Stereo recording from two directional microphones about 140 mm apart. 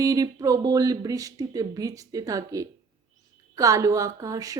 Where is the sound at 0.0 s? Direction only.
25° right (ahead or behind).